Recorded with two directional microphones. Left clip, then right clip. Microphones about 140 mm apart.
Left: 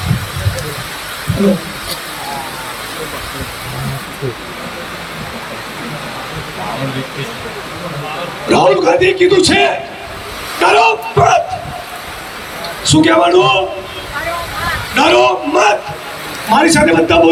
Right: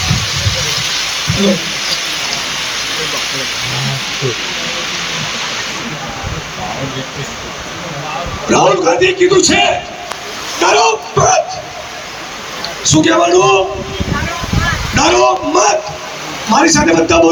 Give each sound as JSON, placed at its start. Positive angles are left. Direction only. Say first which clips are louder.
{"t": 8.4, "sound": "a man's voice", "louder": "left 1 dB", "side_deg": 30}
{"t": 12.9, "sound": "a man's voice", "louder": "left 1 dB", "side_deg": 30}
{"t": 14.9, "sound": "a man's voice", "louder": "left 1 dB", "side_deg": 30}
{"t": 16.7, "sound": "a man's voice", "louder": "left 1 dB", "side_deg": 30}